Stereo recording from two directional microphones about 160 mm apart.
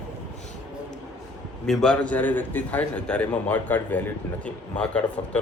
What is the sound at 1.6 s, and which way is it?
Speech, 5° left (ahead or behind).